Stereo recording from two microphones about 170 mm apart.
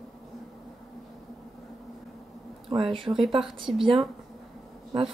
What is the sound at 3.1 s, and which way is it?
Speech, 20° right (ahead or behind).